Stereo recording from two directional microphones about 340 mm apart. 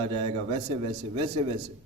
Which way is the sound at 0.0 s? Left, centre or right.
Centre.